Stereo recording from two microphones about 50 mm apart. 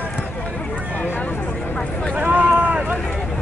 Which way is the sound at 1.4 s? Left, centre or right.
Left.